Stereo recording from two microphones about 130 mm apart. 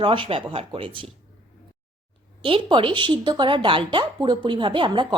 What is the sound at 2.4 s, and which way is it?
Speech, 45° right (ahead or behind).